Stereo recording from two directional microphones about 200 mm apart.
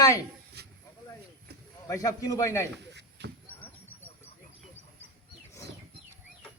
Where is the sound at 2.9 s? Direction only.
60° right (ahead or behind).